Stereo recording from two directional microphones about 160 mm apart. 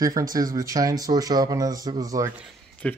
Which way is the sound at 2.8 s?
5° left (ahead or behind).